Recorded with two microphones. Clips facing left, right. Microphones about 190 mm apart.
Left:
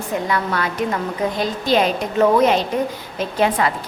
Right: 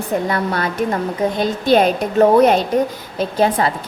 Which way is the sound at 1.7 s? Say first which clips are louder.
Right 4 dB; 50° right (ahead or behind).